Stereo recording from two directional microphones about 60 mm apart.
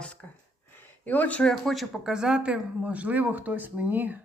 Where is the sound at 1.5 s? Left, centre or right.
Centre.